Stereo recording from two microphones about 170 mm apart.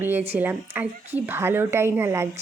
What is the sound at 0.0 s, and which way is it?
A woman's voice, 10° right (ahead or behind).